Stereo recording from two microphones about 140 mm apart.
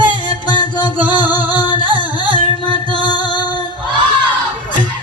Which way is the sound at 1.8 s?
35° right (ahead or behind).